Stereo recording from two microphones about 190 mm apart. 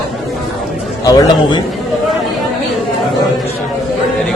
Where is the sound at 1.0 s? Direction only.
25° left (ahead or behind).